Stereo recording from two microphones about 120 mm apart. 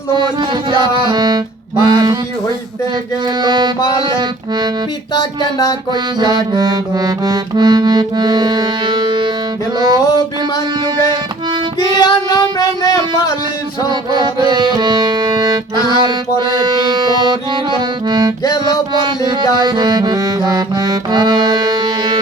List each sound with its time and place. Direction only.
0.7 s music: 40° right (ahead or behind)
3.4 s music: 40° right (ahead or behind)
5.1 s speech: 30° left (ahead or behind)
5.9 s music: 35° right (ahead or behind)
11.9 s a sound: 35° left (ahead or behind)
13.8 s music: 40° right (ahead or behind)
18.4 s speech: 35° left (ahead or behind)
19.0 s music: 40° right (ahead or behind)